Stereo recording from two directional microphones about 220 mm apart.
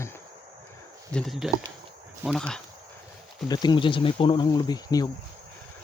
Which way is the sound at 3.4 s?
20° left (ahead or behind).